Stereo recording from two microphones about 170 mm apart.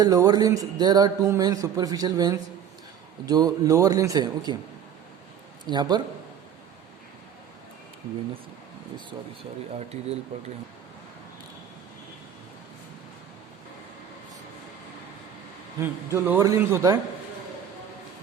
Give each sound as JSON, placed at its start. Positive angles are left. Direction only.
{"t": 0.0, "sound": "a man's voice", "side_deg": -20}
{"t": 5.6, "sound": "a man's voice", "side_deg": -25}
{"t": 15.8, "sound": "a man's voice", "side_deg": -10}